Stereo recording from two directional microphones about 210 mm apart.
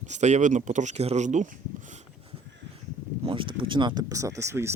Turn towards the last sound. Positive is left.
turn(degrees=-15)  # may be behind; listen again after turning